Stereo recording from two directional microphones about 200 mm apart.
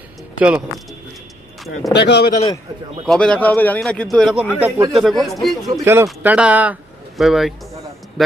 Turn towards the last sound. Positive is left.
turn(degrees=0)  # may be behind; listen again after turning